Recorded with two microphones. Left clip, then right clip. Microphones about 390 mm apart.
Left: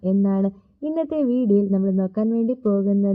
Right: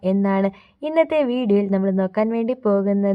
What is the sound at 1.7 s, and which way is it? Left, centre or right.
Speech, centre.